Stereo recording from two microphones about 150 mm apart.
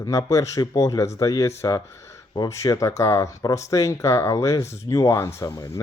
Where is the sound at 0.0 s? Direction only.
20° left (ahead or behind).